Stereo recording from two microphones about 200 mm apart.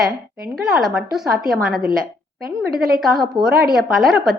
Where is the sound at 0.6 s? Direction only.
Centre (ahead or behind).